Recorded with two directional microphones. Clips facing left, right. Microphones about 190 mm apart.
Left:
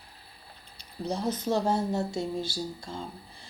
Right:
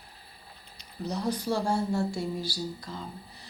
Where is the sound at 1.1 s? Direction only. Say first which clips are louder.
Left 1 dB; 25° left (ahead or behind).